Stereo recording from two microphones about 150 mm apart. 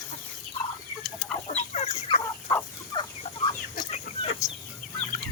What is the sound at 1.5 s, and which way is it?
Chicken, 50° left (ahead or behind).